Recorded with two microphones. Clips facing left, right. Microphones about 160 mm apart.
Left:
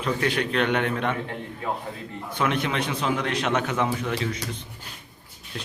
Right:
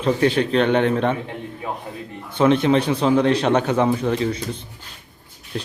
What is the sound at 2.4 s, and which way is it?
A man's voice, 30° right (ahead or behind).